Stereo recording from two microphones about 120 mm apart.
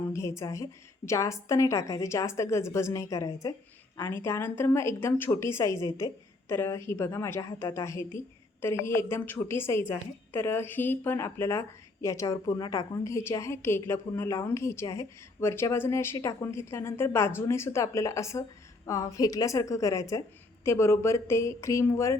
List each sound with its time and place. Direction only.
0.1 s a woman's voice: 25° left (ahead or behind)
13.1 s a woman's voice: 25° left (ahead or behind)